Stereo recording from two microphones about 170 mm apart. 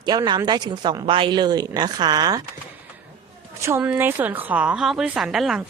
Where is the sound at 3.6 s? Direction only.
15° right (ahead or behind).